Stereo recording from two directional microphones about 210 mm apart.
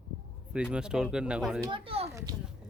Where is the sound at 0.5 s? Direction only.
5° right (ahead or behind).